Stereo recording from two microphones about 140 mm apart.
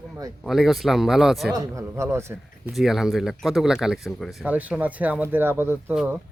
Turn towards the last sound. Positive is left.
turn(degrees=-10)  # may be behind; listen again after turning